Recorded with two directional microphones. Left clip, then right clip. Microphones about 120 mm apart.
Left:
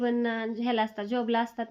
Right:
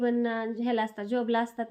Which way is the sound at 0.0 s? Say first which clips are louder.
Even; 40° left (ahead or behind).